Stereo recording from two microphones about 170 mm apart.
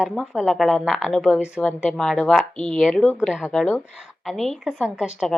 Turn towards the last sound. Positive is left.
turn(degrees=-5)  # may be behind; listen again after turning